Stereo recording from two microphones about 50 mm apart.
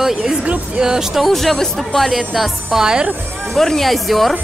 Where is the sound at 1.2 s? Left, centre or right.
Centre.